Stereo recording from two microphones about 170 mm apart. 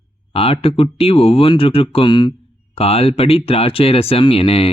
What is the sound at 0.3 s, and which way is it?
Speech, 35° left (ahead or behind).